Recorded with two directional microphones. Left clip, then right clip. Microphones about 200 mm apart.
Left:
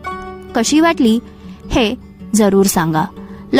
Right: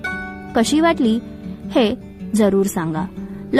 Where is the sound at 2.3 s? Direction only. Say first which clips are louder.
Left 4 dB; 60° left (ahead or behind).